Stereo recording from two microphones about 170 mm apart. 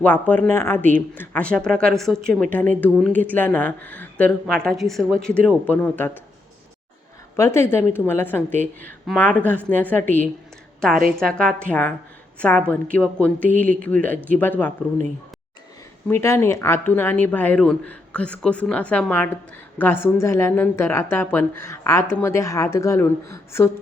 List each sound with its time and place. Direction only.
0.0 s speech: 10° left (ahead or behind)
7.3 s a woman's voice: 15° left (ahead or behind)
16.0 s speech: 15° left (ahead or behind)